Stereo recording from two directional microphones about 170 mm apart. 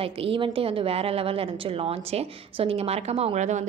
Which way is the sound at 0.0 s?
35° right (ahead or behind).